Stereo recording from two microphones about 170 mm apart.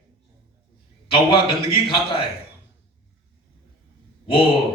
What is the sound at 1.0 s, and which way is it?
A man's voice, 30° left (ahead or behind).